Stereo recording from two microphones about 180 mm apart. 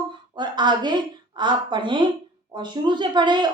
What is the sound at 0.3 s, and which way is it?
Speech, 25° right (ahead or behind).